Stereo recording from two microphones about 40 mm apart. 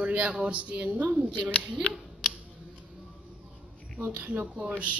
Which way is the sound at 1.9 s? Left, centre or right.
Left.